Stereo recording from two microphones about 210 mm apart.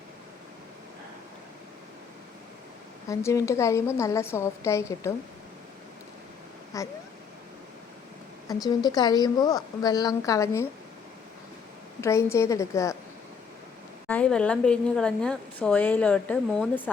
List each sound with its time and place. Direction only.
3.1 s a woman's voice: 15° left (ahead or behind)
6.7 s a woman's voice: 15° left (ahead or behind)
8.6 s a woman's voice: 20° left (ahead or behind)
11.9 s a woman's voice: 15° left (ahead or behind)
14.1 s a woman's voice: 5° left (ahead or behind)